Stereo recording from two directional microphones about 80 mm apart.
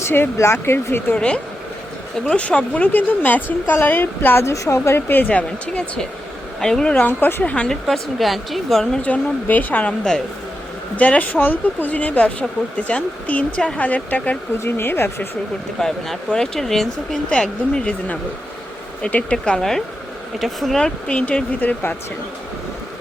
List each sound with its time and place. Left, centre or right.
0.0 s speech: left
1.1 s speech: centre
4.4 s speech: left; by 6.9 s centre
6.9 s speech: left
7.4 s a woman's voice: centre
9.0 s speech: centre
15.8 s a woman's voice: centre
20.8 s speech: centre